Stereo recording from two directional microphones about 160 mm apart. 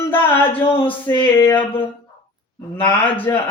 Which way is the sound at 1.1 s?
10° left (ahead or behind).